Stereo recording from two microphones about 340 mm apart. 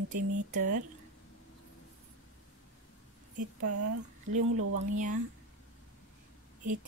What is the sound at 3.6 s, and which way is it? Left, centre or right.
Speech, right.